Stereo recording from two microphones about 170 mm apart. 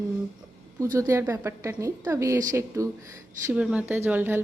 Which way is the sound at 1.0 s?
15° right (ahead or behind).